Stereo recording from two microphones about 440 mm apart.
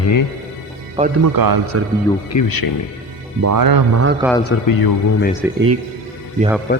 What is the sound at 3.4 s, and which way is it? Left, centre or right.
Speech, right.